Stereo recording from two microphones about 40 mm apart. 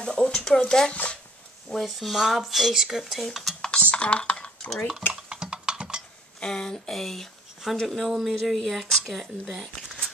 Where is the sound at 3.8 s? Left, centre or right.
Left.